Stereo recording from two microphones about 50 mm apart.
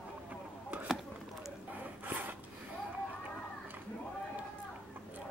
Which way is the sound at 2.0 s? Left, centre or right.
Right.